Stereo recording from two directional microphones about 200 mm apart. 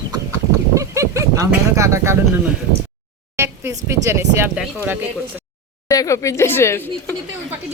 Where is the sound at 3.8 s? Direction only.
15° right (ahead or behind).